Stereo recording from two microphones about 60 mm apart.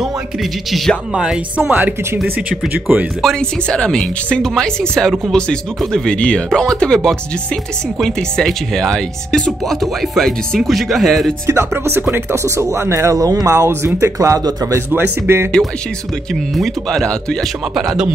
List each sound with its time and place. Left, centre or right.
0.7 s speech: centre
1.1 s speech: centre
1.7 s speech: right
3.3 s speech: centre
11.4 s speech: right
13.7 s speech: right
14.9 s speech: right
16.5 s speech: centre